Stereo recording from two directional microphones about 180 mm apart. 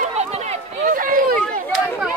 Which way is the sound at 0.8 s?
50° right (ahead or behind).